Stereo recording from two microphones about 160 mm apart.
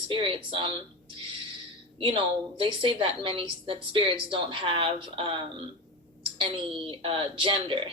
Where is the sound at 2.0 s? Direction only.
35° right (ahead or behind).